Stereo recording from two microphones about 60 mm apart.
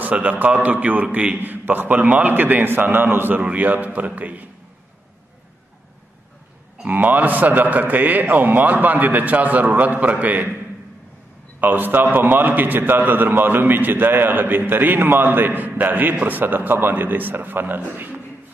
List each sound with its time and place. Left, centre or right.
0.0 s a man's voice: right
6.9 s a man's voice: right
11.6 s a man's voice: right